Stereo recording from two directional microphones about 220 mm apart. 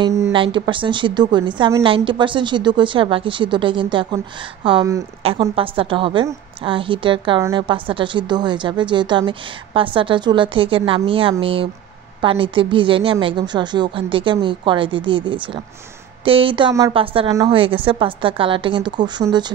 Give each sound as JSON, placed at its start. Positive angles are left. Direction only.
{"t": 0.0, "sound": "a woman's voice", "side_deg": -15}